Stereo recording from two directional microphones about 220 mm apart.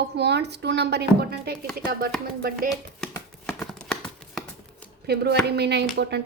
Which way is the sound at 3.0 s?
5° left (ahead or behind).